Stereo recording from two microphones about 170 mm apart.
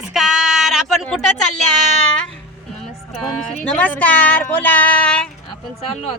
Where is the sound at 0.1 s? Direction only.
Centre (ahead or behind).